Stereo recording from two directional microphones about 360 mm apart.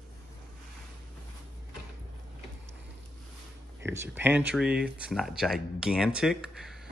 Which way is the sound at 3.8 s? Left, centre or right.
Centre.